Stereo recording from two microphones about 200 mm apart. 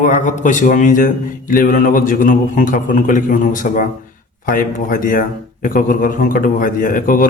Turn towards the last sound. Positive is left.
turn(degrees=45)  # may be behind; listen again after turning